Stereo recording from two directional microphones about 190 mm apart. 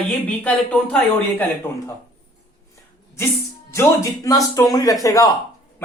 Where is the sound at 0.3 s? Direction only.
5° left (ahead or behind).